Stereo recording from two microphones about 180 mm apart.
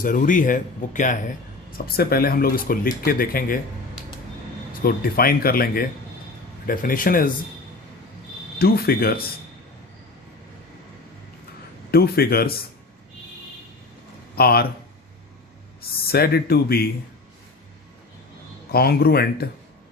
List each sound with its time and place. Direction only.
0.0 s speech: 45° left (ahead or behind)
2.0 s speech: 55° left (ahead or behind)
4.7 s speech: 55° left (ahead or behind)
8.5 s speech: 60° left (ahead or behind)
11.9 s speech: 60° left (ahead or behind)
14.3 s speech: 60° left (ahead or behind)
16.0 s speech: 60° left (ahead or behind)
18.7 s speech: 60° left (ahead or behind)